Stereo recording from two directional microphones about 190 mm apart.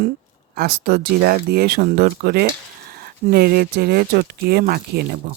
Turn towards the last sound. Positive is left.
turn(degrees=-55)  # may be behind; listen again after turning